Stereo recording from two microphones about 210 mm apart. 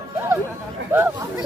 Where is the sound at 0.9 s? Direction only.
10° right (ahead or behind).